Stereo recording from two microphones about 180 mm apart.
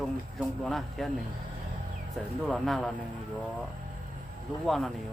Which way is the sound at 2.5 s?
Centre (ahead or behind).